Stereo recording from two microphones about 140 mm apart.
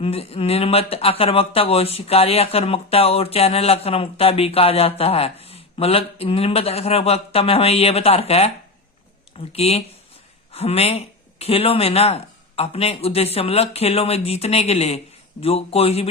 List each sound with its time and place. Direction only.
0.0 s speech: 45° left (ahead or behind)